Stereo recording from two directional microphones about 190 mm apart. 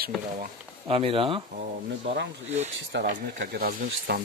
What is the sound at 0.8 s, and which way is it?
Speech, 30° right (ahead or behind).